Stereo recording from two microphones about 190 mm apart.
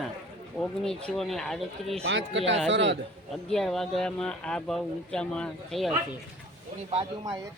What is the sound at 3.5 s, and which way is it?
Speech, centre (ahead or behind).